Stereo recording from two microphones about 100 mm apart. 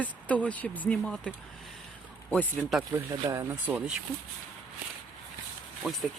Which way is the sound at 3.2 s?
30° right (ahead or behind).